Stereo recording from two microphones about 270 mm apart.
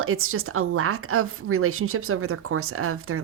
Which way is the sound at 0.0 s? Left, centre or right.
Right.